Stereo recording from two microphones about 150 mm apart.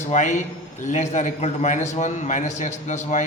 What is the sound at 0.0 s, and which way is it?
A man's voice, 55° left (ahead or behind).